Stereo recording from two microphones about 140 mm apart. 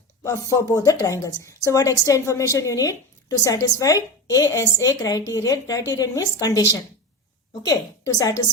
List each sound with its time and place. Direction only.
0.3 s a woman's voice: 20° left (ahead or behind)